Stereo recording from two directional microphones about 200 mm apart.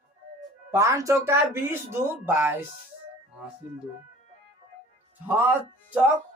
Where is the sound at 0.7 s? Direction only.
15° right (ahead or behind).